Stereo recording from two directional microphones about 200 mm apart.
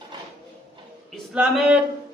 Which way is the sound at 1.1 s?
5° right (ahead or behind).